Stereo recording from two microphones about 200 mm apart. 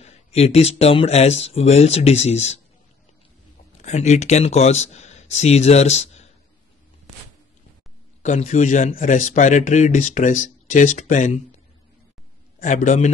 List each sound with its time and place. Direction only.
0.0 s speech: 30° left (ahead or behind)
3.8 s speech: 35° left (ahead or behind)
8.2 s speech: 40° left (ahead or behind)
12.5 s a man's voice: 40° left (ahead or behind)